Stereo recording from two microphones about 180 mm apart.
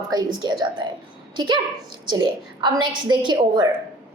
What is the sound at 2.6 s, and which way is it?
A woman's voice, 25° right (ahead or behind).